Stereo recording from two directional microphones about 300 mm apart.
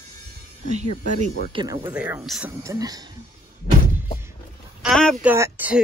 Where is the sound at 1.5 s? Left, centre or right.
Centre.